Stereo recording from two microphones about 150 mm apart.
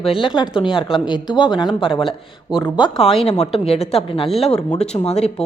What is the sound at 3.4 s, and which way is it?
Speech, 45° left (ahead or behind).